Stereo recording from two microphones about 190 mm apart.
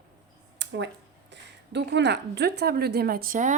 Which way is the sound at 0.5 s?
70° right (ahead or behind).